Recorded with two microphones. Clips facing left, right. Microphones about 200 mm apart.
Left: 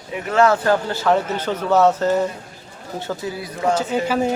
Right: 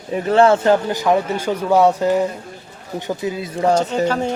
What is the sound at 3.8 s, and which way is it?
Speech, 5° left (ahead or behind).